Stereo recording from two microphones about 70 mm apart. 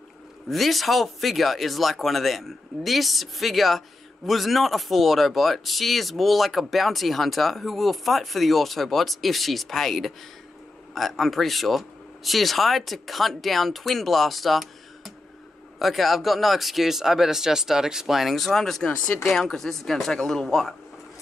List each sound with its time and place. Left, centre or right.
0.5 s speech: centre
18.9 s speech: centre
19.2 s speech: centre